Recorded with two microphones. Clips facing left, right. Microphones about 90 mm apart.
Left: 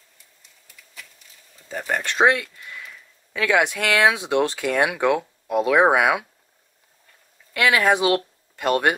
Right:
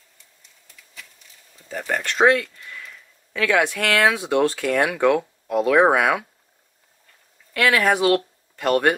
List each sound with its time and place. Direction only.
1.7 s speech: 15° left (ahead or behind)
7.5 s speech: 15° left (ahead or behind)